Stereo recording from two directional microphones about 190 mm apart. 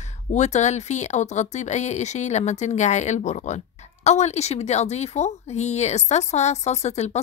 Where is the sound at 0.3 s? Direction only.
40° left (ahead or behind).